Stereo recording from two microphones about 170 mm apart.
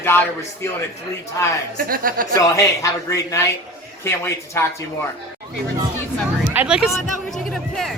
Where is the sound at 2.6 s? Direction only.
20° left (ahead or behind).